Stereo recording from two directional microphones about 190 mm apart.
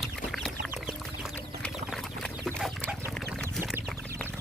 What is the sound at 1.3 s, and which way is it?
Chicken, 5° left (ahead or behind).